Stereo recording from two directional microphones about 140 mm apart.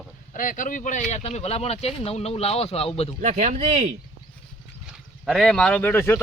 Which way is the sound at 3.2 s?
60° right (ahead or behind).